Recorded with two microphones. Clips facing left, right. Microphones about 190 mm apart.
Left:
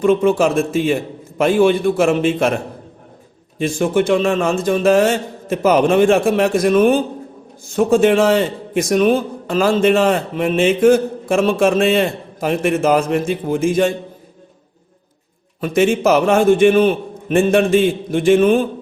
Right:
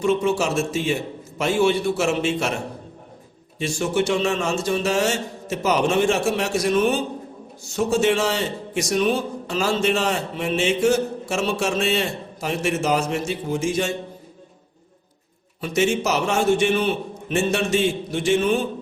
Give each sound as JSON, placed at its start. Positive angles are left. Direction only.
{"t": 0.0, "sound": "a man's voice", "side_deg": 55}
{"t": 3.6, "sound": "a man's voice", "side_deg": 55}
{"t": 15.6, "sound": "a man's voice", "side_deg": 55}